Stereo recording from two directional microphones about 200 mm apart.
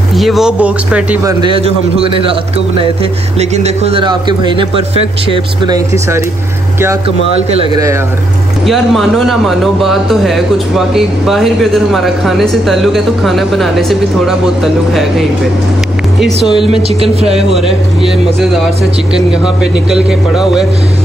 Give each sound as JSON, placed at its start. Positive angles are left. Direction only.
{"t": 0.1, "sound": "speech", "side_deg": 0}
{"t": 1.4, "sound": "speech", "side_deg": -25}
{"t": 7.7, "sound": "speech", "side_deg": -15}
{"t": 8.6, "sound": "speech", "side_deg": 0}
{"t": 17.0, "sound": "speech", "side_deg": -30}
{"t": 17.6, "sound": "speech", "side_deg": 0}
{"t": 19.6, "sound": "speech", "side_deg": -5}